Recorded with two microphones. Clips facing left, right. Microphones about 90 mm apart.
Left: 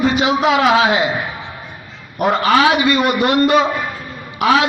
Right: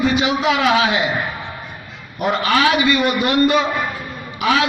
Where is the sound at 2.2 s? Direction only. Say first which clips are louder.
Left 3 dB; 40° left (ahead or behind).